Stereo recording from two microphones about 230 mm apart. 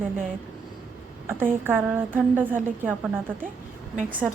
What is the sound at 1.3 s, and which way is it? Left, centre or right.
A woman's voice, centre.